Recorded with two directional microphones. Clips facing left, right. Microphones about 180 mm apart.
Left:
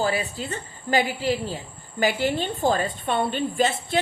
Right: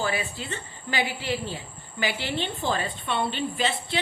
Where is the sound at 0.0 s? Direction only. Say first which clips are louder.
Left 4 dB; 40° left (ahead or behind).